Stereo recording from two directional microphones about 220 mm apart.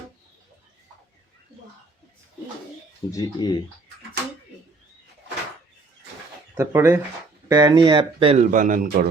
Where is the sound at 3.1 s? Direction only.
15° left (ahead or behind).